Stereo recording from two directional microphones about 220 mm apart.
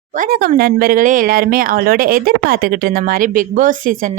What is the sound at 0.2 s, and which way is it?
Speech, 40° right (ahead or behind).